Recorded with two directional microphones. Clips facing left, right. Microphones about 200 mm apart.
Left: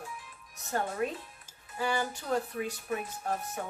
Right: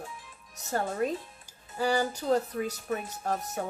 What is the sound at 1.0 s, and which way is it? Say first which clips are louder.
Speech: right 4 dB; 35° right (ahead or behind).